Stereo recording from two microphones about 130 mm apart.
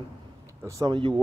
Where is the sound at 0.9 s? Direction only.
35° right (ahead or behind).